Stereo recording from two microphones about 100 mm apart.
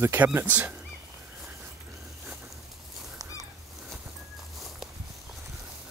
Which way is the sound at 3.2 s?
35° right (ahead or behind).